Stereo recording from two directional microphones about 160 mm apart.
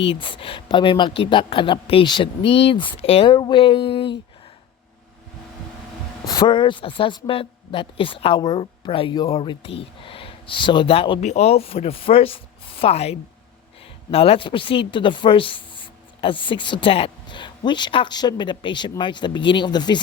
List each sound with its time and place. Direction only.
0.0 s speech: 35° left (ahead or behind)
6.2 s speech: 25° left (ahead or behind)
11.2 s speech: 45° left (ahead or behind); by 20.0 s 25° left (ahead or behind)